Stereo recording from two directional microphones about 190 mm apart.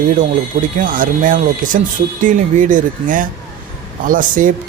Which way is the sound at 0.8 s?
45° right (ahead or behind).